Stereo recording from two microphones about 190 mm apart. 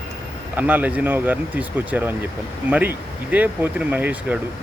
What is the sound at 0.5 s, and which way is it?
Speech, 10° right (ahead or behind).